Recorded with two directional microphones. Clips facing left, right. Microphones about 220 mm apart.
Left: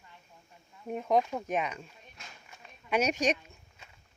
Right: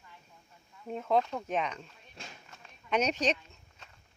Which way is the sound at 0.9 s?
15° left (ahead or behind).